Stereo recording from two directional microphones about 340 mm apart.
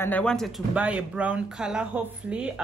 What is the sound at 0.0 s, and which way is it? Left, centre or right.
A woman's voice, centre.